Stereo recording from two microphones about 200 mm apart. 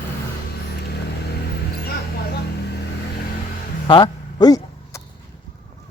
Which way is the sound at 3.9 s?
25° left (ahead or behind).